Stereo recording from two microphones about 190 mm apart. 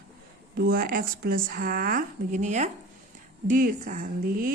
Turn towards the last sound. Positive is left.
turn(degrees=-45)  # may be behind; listen again after turning